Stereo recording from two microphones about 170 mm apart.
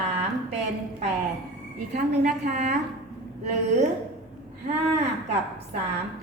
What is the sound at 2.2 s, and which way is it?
Speech, 50° right (ahead or behind).